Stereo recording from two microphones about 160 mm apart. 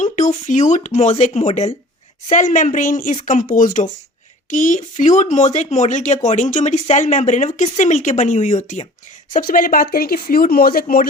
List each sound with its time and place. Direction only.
0.0 s speech: 50° left (ahead or behind)
9.3 s speech: 60° left (ahead or behind)